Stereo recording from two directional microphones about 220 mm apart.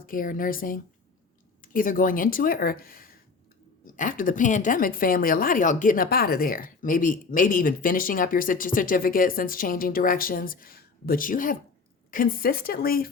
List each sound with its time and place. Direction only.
0.0 s a woman's voice: 40° left (ahead or behind)